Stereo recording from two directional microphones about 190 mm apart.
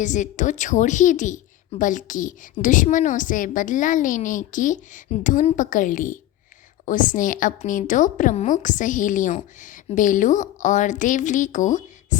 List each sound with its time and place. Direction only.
0.0 s a woman's voice: 40° left (ahead or behind)